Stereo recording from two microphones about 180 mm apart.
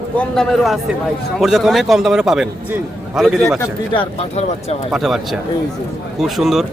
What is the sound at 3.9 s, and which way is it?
Speech, 35° left (ahead or behind).